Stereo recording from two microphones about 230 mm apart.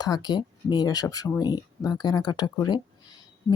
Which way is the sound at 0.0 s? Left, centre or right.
Centre.